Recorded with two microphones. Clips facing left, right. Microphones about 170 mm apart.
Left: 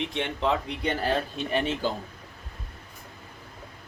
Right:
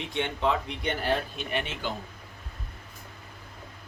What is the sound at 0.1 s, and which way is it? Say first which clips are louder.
Speech: right 4 dB; 35° left (ahead or behind).